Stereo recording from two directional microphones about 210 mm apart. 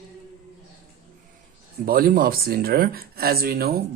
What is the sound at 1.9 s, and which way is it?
Speech, 45° right (ahead or behind).